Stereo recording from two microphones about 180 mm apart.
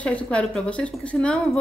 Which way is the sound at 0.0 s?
5° left (ahead or behind).